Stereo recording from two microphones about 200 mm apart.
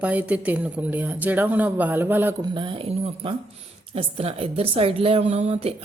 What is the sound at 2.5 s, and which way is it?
A woman's voice, 25° right (ahead or behind).